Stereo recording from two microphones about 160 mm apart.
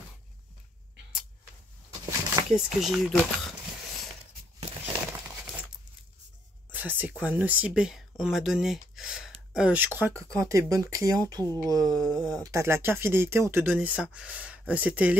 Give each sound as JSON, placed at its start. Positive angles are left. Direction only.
{"t": 2.5, "sound": "speech", "side_deg": 0}
{"t": 4.6, "sound": "a sound", "side_deg": -40}
{"t": 6.7, "sound": "speech", "side_deg": -10}